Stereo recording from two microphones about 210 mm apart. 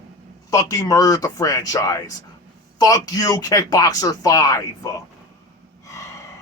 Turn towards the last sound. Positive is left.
turn(degrees=15)  # may be behind; listen again after turning